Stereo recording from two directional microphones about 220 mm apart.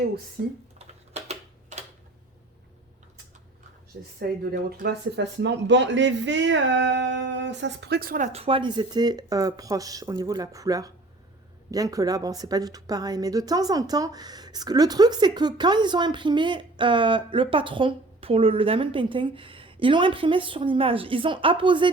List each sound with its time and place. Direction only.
0.8 s typewriter: 30° right (ahead or behind)
3.9 s a woman's voice: 50° right (ahead or behind); by 21.8 s 20° right (ahead or behind)